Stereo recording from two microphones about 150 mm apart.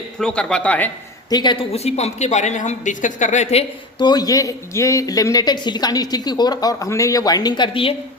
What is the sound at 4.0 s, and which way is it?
Speech, 30° left (ahead or behind).